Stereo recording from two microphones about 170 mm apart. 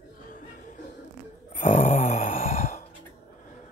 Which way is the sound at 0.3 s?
50° left (ahead or behind).